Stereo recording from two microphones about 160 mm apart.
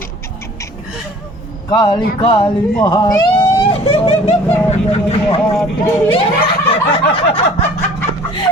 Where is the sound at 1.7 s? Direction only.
30° left (ahead or behind).